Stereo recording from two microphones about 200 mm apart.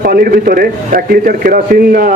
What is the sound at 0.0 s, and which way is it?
A man's voice, 45° right (ahead or behind).